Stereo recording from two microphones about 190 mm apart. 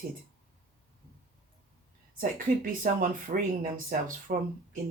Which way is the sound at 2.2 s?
45° right (ahead or behind).